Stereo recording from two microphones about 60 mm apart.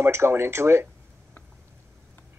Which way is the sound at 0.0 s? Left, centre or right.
Right.